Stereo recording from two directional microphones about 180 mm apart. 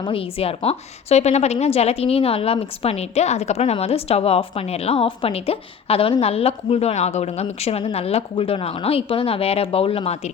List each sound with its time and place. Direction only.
0.0 s a woman's voice: 30° left (ahead or behind)